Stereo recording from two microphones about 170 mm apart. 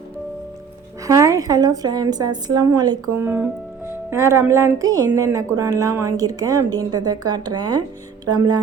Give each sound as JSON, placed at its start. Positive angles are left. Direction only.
{"t": 1.0, "sound": "a woman's voice", "side_deg": -20}
{"t": 3.2, "sound": "a woman's voice", "side_deg": -10}